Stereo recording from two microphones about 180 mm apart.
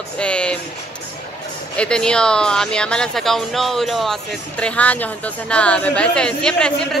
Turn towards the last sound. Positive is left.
turn(degrees=5)  # may be behind; listen again after turning